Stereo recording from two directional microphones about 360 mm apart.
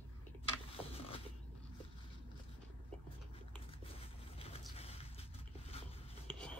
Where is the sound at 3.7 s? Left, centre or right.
Centre.